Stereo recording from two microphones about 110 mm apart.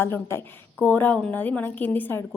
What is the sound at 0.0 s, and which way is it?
A woman's voice, 25° left (ahead or behind).